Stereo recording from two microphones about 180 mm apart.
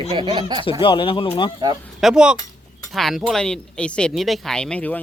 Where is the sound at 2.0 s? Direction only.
5° right (ahead or behind).